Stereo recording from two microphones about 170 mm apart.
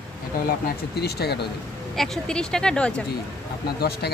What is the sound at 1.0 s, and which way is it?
Speech, 70° left (ahead or behind).